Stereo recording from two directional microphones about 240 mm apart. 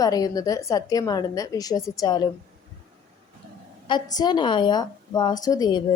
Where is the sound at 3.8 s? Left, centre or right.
Centre.